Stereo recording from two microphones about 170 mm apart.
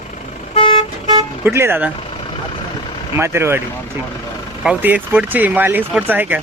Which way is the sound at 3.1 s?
15° right (ahead or behind).